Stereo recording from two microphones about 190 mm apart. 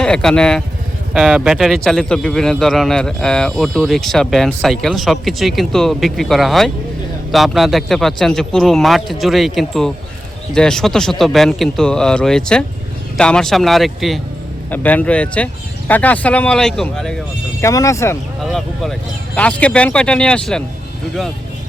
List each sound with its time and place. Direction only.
0.0 s a man's voice: 5° left (ahead or behind)
17.6 s speech: 15° left (ahead or behind)
18.4 s a man's voice: centre (ahead or behind)